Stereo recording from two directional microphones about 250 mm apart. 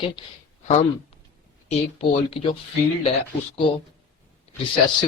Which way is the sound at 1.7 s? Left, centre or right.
Left.